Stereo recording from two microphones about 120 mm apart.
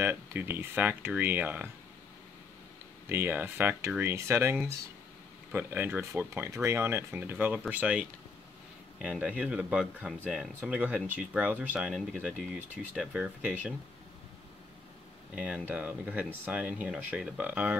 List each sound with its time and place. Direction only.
0.0 s speech: 20° right (ahead or behind)
3.1 s speech: 15° right (ahead or behind)
15.3 s speech: 10° right (ahead or behind)